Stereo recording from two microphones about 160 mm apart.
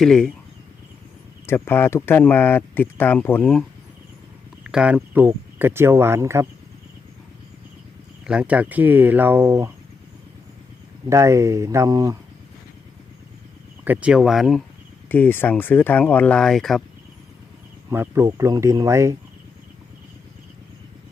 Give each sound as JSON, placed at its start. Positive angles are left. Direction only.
{"t": 0.0, "sound": "speech", "side_deg": 5}
{"t": 1.5, "sound": "speech", "side_deg": 15}
{"t": 8.2, "sound": "speech", "side_deg": -5}
{"t": 11.1, "sound": "speech", "side_deg": -20}
{"t": 13.8, "sound": "speech", "side_deg": -10}
{"t": 15.1, "sound": "speech", "side_deg": 10}
{"t": 17.9, "sound": "speech", "side_deg": -15}